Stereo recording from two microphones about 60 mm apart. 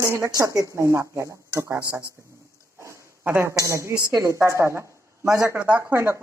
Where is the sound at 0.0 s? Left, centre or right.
Right.